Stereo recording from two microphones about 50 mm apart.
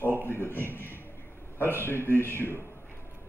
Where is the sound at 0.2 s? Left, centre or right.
Left.